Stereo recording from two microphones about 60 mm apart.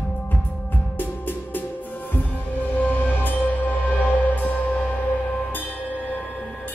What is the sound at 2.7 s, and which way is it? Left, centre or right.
Music, left.